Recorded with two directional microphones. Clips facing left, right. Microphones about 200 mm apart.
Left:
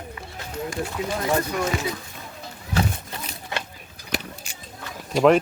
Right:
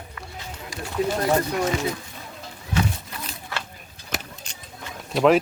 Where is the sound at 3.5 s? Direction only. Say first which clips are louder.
Left 3 dB; 20° left (ahead or behind).